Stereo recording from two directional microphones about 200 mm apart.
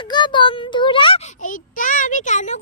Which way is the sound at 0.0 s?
25° left (ahead or behind).